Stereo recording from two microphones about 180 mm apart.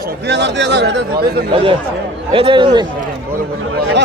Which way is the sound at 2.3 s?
30° right (ahead or behind).